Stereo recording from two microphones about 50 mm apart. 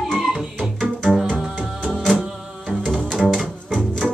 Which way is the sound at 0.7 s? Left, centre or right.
Centre.